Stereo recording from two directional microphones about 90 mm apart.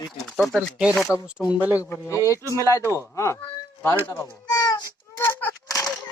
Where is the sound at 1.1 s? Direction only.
30° left (ahead or behind).